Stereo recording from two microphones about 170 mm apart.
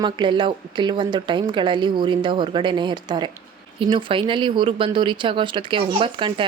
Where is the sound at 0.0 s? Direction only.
30° right (ahead or behind).